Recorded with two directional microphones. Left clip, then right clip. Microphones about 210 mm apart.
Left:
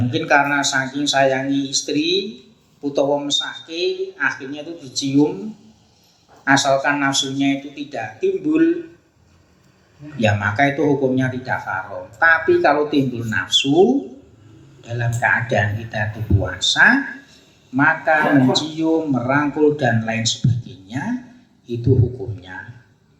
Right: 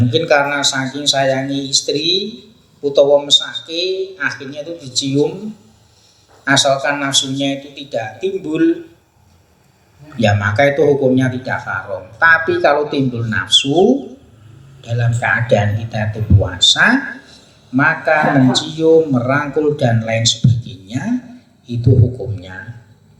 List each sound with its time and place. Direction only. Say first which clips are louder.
0.0 s speech: right 3 dB; 55° right (ahead or behind)
6.4 s speech: right 2 dB; 55° right (ahead or behind)
10.2 s a man's voice: right 4 dB; 55° right (ahead or behind)